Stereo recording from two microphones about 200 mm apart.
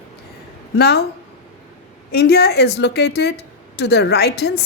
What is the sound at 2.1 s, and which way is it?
Speech, 55° left (ahead or behind).